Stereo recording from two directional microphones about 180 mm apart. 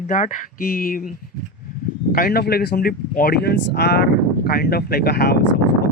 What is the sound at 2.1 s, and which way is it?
Speech, 55° left (ahead or behind).